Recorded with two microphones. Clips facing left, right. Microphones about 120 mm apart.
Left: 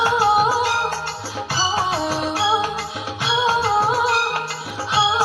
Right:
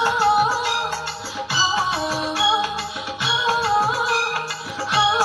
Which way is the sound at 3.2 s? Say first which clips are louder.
Left 2 dB; 35° left (ahead or behind).